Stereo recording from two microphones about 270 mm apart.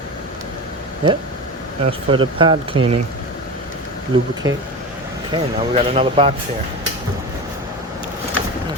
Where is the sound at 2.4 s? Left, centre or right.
Centre.